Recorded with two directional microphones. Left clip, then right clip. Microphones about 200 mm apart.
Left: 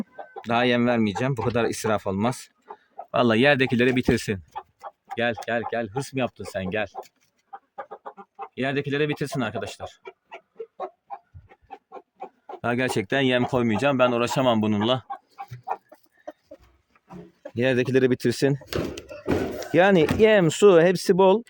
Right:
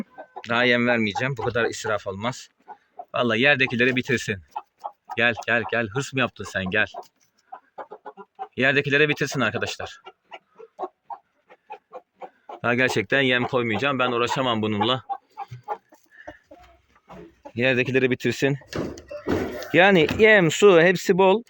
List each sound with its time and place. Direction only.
0.4 s speech: 20° left (ahead or behind)
5.1 s speech: 10° left (ahead or behind)
8.5 s speech: 5° left (ahead or behind)
12.6 s speech: 10° left (ahead or behind)
17.5 s speech: 20° left (ahead or behind)